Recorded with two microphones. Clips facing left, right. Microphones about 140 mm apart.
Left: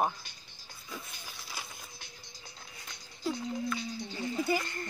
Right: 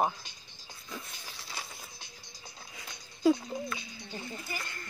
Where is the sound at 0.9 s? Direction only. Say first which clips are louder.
Right 1 dB; centre (ahead or behind).